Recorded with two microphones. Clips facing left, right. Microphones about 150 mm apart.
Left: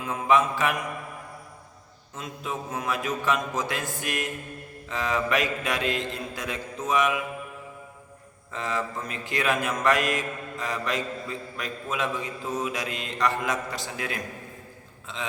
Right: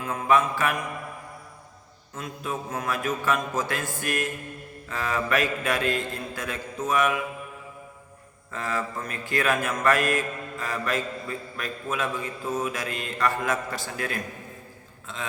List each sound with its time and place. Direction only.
0.0 s mantra: 20° left (ahead or behind)
2.1 s a man's voice: 20° left (ahead or behind)
8.5 s a man's voice: 20° left (ahead or behind)